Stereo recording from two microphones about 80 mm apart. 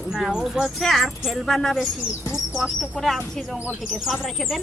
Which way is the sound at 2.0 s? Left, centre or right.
Left.